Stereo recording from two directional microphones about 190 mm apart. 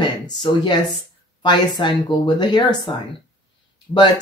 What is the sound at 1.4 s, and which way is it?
Speech, 25° left (ahead or behind).